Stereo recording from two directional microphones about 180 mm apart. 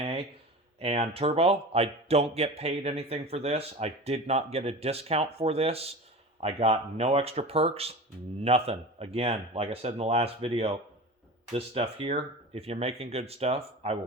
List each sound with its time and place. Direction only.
0.8 s speech: 30° right (ahead or behind)